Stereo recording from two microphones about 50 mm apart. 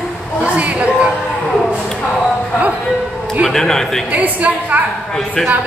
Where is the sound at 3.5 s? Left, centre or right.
Centre.